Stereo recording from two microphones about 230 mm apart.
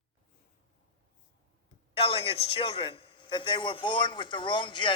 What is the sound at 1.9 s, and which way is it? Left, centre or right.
A man's voice, left.